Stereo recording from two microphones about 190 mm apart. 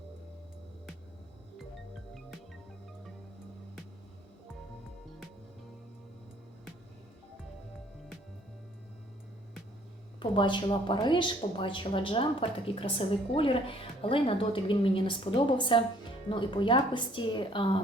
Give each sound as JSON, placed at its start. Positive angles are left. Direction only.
{"t": 10.2, "sound": "speech", "side_deg": 25}